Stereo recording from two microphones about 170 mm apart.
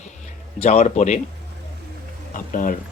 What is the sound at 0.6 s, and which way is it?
Speech, 40° left (ahead or behind).